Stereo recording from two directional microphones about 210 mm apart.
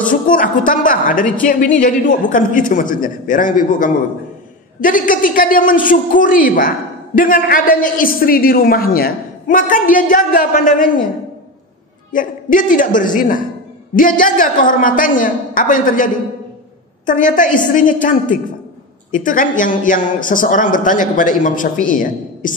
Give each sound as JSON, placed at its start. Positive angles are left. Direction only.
{"t": 0.1, "sound": "a man's voice", "side_deg": 40}
{"t": 12.1, "sound": "a man's voice", "side_deg": 40}
{"t": 19.1, "sound": "a man's voice", "side_deg": 40}